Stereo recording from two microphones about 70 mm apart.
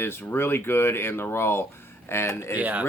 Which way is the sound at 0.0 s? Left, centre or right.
Left.